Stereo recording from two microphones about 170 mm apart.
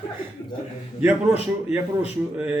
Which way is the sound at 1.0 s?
10° right (ahead or behind).